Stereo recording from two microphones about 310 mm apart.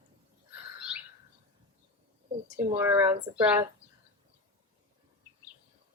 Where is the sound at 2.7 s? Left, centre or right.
Centre.